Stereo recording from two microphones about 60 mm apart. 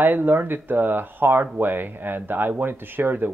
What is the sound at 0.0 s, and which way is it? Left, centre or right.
Speech, right.